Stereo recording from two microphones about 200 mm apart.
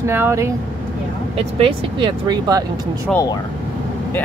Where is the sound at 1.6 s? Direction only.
25° right (ahead or behind).